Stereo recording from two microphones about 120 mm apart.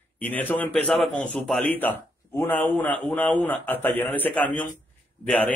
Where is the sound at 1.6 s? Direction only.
15° left (ahead or behind).